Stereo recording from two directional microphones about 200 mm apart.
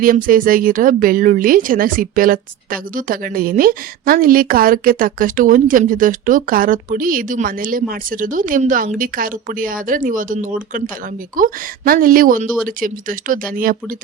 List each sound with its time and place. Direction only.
0.0 s speech: 45° right (ahead or behind)